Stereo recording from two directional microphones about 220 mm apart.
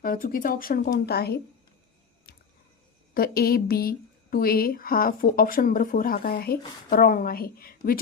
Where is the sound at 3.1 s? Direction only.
45° left (ahead or behind).